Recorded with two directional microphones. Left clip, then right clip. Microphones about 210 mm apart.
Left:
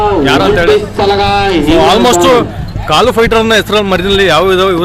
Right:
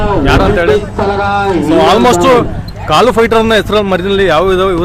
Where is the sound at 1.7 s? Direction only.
Centre (ahead or behind).